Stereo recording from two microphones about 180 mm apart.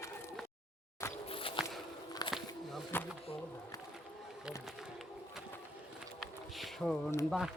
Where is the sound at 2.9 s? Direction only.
10° left (ahead or behind).